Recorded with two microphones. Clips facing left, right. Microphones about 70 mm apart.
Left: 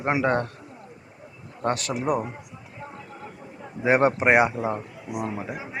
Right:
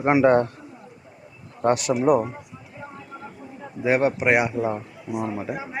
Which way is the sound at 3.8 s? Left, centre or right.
Left.